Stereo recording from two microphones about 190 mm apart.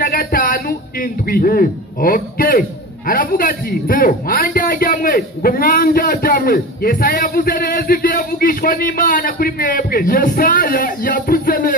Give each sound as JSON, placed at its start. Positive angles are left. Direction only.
{"t": 0.0, "sound": "a man's voice", "side_deg": 50}